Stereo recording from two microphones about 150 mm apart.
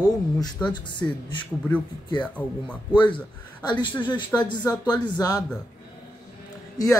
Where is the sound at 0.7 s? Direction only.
30° left (ahead or behind).